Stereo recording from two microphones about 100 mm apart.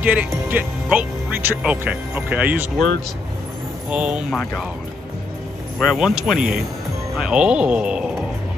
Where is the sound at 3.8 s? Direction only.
10° right (ahead or behind).